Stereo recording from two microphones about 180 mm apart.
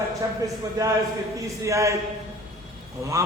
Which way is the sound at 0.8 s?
20° right (ahead or behind).